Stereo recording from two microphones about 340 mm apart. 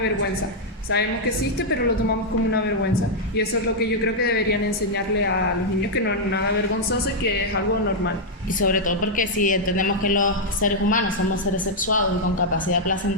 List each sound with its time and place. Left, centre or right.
8.6 s a woman's voice: left